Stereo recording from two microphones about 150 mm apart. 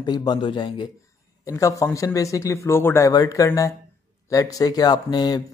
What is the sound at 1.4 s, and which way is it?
Speech, 20° left (ahead or behind).